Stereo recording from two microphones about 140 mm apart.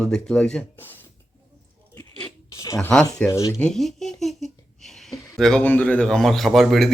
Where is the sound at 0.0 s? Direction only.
5° left (ahead or behind).